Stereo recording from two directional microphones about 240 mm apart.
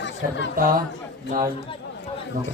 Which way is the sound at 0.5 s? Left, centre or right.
Right.